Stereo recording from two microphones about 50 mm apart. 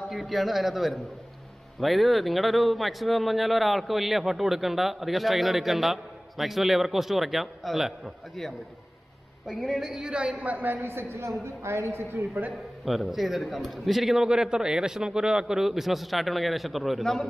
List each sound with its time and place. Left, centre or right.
0.1 s speech: centre
9.5 s speech: centre
9.8 s a man's voice: centre
10.1 s a woman's voice: right
12.8 s a man's voice: centre
17.0 s a man's voice: centre